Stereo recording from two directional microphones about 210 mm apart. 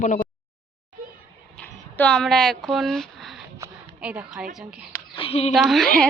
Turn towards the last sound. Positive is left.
turn(degrees=5)  # may be behind; listen again after turning